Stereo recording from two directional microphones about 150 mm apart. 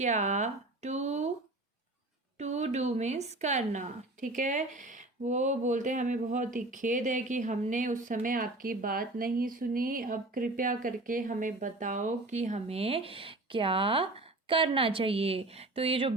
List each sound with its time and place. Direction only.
0.0 s speech: 50° right (ahead or behind)
2.4 s speech: 50° right (ahead or behind)